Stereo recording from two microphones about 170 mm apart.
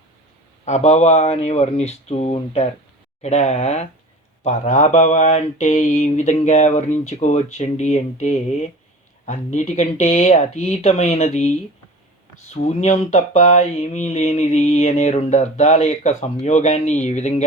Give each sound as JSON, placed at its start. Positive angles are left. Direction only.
{"t": 0.6, "sound": "speech", "side_deg": 40}
{"t": 12.6, "sound": "speech", "side_deg": 40}